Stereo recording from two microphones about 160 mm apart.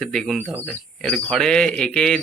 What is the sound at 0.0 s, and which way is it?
Speech, 5° left (ahead or behind).